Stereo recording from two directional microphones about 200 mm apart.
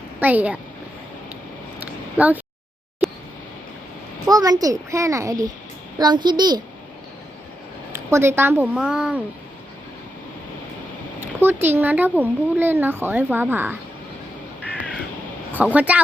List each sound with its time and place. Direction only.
0.2 s speech: 10° right (ahead or behind)
1.8 s a sound: 10° right (ahead or behind)
4.3 s a child's voice: 20° right (ahead or behind)
8.1 s speech: 10° right (ahead or behind)
11.3 s speech: 10° right (ahead or behind)
15.5 s speech: 5° right (ahead or behind)